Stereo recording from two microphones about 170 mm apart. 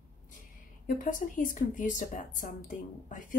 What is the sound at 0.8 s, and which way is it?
A woman's voice, 50° left (ahead or behind).